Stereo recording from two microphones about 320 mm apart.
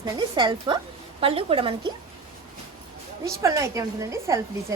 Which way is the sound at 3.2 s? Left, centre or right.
Centre.